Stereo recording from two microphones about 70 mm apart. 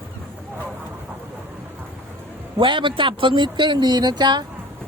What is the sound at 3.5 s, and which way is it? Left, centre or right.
Speech, right.